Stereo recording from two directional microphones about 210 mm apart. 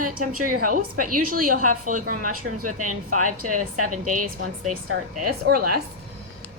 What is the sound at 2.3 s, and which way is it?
Speech, 90° right.